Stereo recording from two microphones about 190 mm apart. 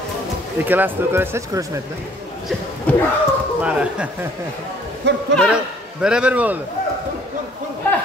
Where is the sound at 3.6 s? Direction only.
5° right (ahead or behind).